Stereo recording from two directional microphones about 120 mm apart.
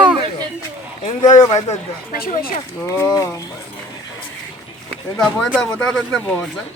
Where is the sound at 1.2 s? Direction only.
35° left (ahead or behind).